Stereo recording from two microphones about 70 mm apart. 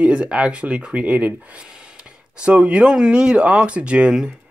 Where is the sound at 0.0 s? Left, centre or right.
Centre.